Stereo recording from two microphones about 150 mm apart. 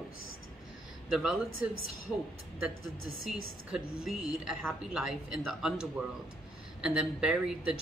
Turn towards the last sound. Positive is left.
turn(degrees=-5)  # may be behind; listen again after turning